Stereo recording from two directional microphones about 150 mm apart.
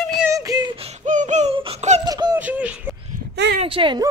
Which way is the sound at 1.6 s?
40° right (ahead or behind).